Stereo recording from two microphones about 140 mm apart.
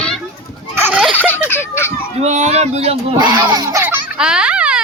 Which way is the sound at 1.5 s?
15° left (ahead or behind).